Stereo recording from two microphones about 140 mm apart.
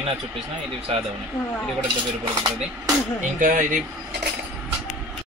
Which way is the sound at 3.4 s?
70° right (ahead or behind).